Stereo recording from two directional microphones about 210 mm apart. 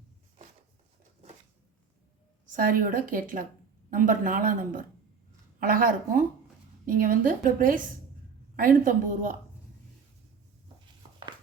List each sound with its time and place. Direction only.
2.6 s speech: 40° right (ahead or behind)